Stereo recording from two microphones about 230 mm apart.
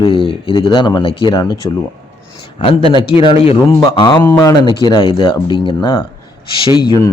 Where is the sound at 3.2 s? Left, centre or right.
Left.